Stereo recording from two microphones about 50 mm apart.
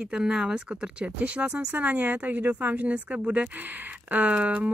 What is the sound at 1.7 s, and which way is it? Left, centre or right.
Speech, right.